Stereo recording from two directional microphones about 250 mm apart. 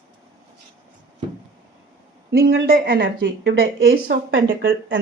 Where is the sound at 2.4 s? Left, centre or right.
Right.